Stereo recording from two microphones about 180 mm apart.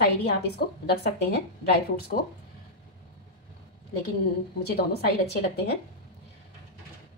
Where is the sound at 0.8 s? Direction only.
65° left (ahead or behind).